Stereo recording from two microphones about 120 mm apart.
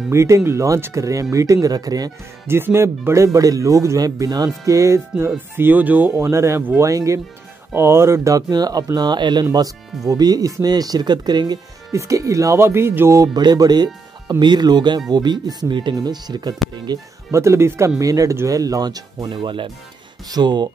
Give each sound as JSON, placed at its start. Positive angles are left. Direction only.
{"t": 0.1, "sound": "speech", "side_deg": -25}
{"t": 2.4, "sound": "speech", "side_deg": -20}
{"t": 17.3, "sound": "speech", "side_deg": -25}